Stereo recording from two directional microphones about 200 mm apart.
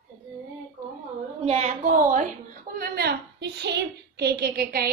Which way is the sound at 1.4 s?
30° right (ahead or behind).